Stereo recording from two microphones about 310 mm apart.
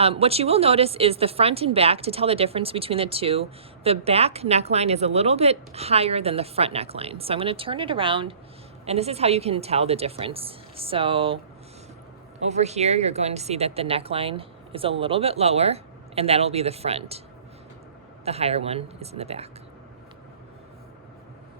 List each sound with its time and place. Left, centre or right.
0.0 s speech: centre
12.5 s speech: right
18.3 s speech: centre